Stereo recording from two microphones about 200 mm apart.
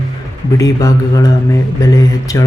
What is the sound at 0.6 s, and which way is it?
Speech, 15° left (ahead or behind).